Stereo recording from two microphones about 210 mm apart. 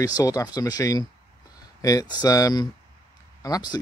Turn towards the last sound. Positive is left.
turn(degrees=15)  # may be behind; listen again after turning